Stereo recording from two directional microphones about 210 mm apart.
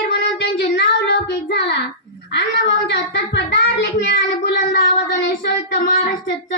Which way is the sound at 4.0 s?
55° left (ahead or behind).